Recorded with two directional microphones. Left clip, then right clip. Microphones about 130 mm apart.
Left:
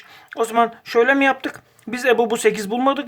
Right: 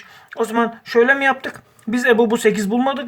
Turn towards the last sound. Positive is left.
turn(degrees=40)  # may be behind; listen again after turning